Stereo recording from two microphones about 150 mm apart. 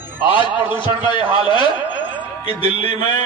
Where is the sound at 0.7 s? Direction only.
30° left (ahead or behind).